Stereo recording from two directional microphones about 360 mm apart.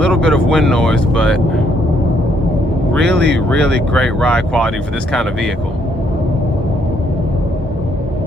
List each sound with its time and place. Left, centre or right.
0.0 s speech: centre
2.9 s speech: centre